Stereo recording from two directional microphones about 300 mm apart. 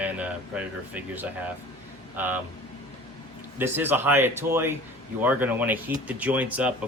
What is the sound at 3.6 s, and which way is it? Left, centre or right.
Speech, centre.